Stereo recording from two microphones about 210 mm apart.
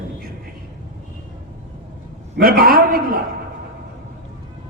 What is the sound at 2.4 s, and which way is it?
Speech, 45° right (ahead or behind).